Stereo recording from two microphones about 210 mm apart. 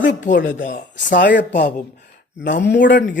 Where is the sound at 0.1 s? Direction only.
35° left (ahead or behind).